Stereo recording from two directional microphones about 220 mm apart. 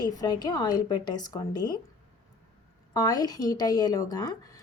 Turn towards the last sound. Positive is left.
turn(degrees=15)  # may be behind; listen again after turning